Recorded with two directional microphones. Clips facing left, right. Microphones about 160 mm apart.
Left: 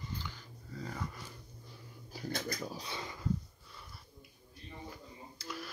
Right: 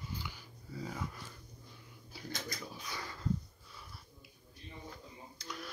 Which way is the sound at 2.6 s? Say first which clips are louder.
Left 5 dB; 40° left (ahead or behind).